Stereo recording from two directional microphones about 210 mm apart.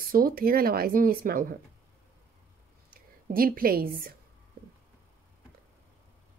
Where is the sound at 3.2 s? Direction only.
45° right (ahead or behind).